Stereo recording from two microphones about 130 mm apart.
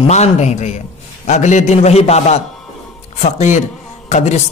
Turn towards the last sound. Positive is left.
turn(degrees=65)  # may be behind; listen again after turning